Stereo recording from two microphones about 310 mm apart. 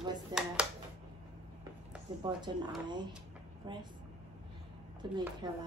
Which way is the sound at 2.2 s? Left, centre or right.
Centre.